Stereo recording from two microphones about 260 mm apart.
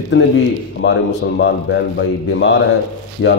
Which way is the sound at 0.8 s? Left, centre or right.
Left.